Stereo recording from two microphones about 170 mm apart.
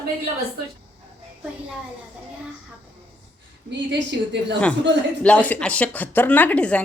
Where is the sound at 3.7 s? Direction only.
90° right.